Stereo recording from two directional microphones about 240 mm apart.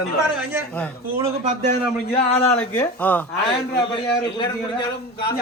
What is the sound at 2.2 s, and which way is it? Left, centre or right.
Speech, left.